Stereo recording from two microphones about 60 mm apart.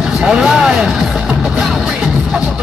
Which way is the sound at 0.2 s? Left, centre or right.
Centre.